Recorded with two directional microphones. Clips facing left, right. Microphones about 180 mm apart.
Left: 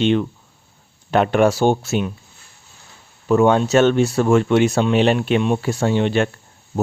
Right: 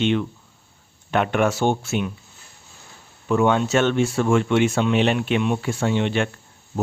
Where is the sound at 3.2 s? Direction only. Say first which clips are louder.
Left 4 dB; 40° left (ahead or behind).